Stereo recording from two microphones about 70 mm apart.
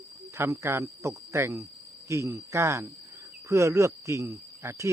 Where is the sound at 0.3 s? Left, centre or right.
Right.